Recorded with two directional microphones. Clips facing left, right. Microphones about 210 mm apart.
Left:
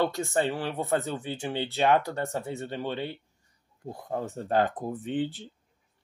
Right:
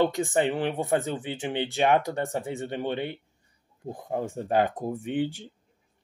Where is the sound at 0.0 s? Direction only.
15° right (ahead or behind).